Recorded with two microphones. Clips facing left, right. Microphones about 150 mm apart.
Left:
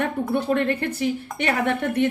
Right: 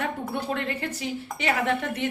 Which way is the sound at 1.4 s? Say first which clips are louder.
Left 2 dB; 55° left (ahead or behind).